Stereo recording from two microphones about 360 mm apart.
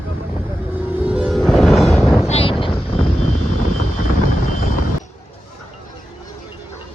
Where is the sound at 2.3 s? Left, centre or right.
Centre.